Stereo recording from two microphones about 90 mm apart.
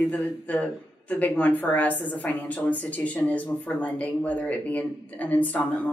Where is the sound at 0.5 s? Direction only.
15° left (ahead or behind).